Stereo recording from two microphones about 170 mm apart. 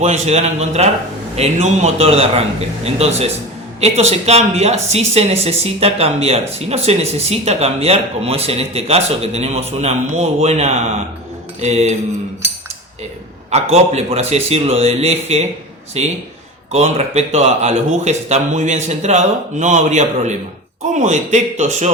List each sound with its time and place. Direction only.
0.0 s speech: 40° right (ahead or behind)
13.5 s a man's voice: 40° right (ahead or behind)